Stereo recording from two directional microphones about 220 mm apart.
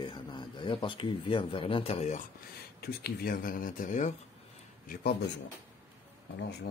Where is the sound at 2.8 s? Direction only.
40° left (ahead or behind).